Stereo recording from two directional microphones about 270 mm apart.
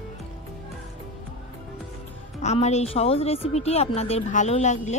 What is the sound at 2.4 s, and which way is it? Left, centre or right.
A woman's voice, left.